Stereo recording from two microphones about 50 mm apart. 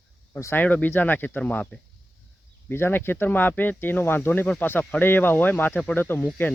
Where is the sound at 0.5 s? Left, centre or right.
Left.